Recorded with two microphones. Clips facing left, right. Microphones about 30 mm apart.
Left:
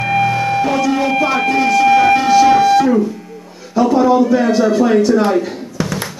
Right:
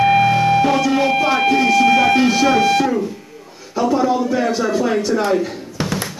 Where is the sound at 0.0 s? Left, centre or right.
Centre.